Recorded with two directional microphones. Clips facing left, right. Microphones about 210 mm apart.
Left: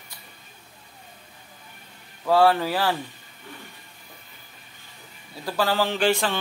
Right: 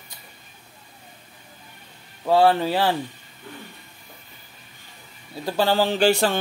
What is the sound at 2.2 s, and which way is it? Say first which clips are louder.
Speech: right 1 dB; 25° right (ahead or behind).